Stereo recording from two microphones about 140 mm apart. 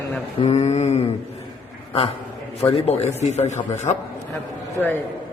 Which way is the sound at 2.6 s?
45° left (ahead or behind).